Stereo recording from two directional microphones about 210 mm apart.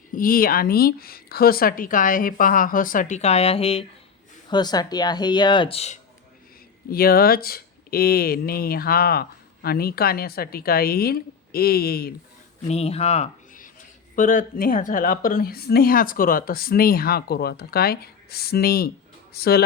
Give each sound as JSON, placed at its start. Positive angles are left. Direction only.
{"t": 0.1, "sound": "speech", "side_deg": 40}
{"t": 6.9, "sound": "speech", "side_deg": 45}
{"t": 12.6, "sound": "speech", "side_deg": 30}